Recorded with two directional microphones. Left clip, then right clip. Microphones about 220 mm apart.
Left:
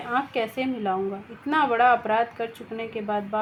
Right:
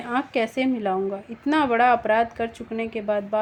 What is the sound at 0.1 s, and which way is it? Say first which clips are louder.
A woman's voice: right 2 dB; 45° right (ahead or behind).